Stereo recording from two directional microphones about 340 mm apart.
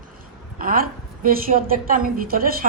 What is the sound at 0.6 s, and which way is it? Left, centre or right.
Speech, right.